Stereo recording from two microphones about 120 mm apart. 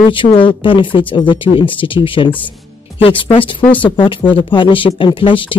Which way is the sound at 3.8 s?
45° left (ahead or behind).